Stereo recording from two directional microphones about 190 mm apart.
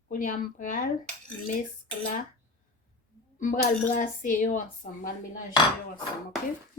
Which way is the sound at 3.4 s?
45° left (ahead or behind).